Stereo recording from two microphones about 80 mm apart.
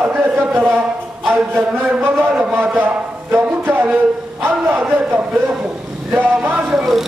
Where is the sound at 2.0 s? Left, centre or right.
Right.